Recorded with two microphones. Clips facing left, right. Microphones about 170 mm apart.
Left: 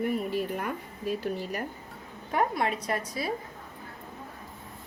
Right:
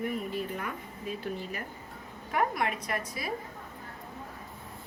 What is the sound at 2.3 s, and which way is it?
Speech, 30° left (ahead or behind).